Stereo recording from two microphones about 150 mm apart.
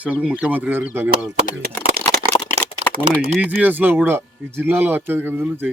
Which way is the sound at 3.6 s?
10° right (ahead or behind).